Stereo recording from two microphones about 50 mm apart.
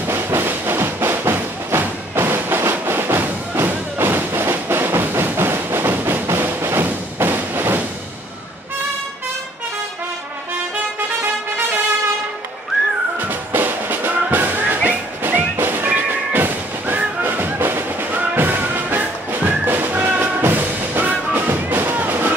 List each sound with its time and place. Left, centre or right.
0.1 s music: right
13.2 s music: right
21.0 s music: right
21.5 s music: right